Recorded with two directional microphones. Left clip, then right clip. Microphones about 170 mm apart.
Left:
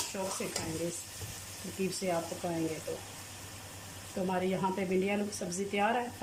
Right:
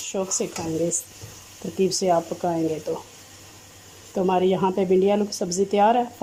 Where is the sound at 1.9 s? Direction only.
40° right (ahead or behind).